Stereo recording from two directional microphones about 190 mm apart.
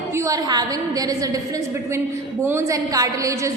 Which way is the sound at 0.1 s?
15° right (ahead or behind).